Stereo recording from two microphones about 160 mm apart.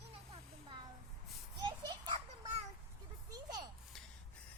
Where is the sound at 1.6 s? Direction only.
25° right (ahead or behind).